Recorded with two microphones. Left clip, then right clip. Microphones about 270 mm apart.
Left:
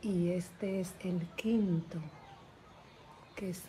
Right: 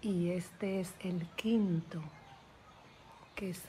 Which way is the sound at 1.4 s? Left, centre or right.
Centre.